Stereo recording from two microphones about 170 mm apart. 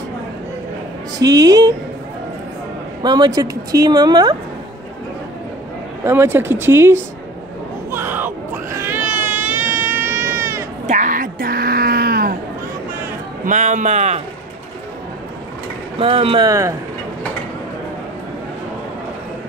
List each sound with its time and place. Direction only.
1.2 s a woman's voice: 20° right (ahead or behind)
3.0 s a woman's voice: 25° right (ahead or behind)
6.0 s speech: 15° right (ahead or behind)
7.9 s a sound: 10° right (ahead or behind)
9.9 s baby cry: 15° right (ahead or behind)
10.9 s a sound: 50° right (ahead or behind)
13.5 s speech: 45° right (ahead or behind)
16.0 s speech: 35° right (ahead or behind)
16.4 s speech: 20° right (ahead or behind)